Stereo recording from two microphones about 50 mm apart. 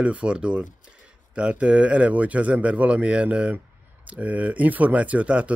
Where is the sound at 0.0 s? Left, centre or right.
Right.